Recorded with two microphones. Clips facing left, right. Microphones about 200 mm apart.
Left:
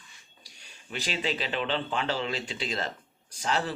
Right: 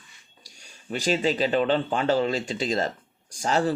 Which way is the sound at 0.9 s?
45° right (ahead or behind).